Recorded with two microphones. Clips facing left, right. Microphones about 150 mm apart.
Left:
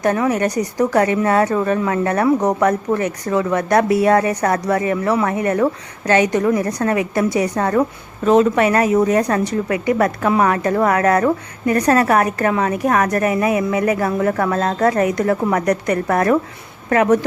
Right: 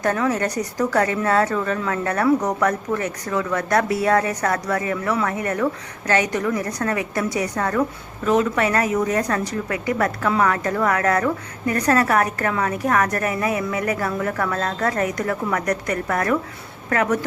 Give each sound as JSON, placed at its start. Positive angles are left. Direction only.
{"t": 0.0, "sound": "a woman's voice", "side_deg": 15}